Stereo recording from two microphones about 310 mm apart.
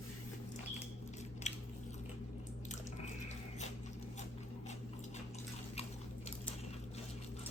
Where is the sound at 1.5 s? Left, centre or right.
Left.